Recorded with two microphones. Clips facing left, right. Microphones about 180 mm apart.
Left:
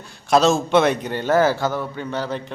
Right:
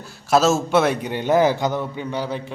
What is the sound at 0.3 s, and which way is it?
A man's voice, 5° right (ahead or behind).